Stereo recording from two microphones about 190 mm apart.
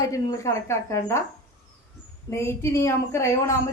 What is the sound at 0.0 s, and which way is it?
Speech, 15° left (ahead or behind).